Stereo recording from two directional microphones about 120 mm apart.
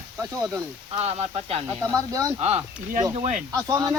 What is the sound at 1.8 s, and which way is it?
Speech, 30° right (ahead or behind).